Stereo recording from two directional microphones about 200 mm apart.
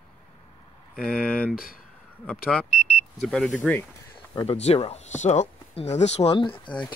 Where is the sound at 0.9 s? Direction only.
5° left (ahead or behind).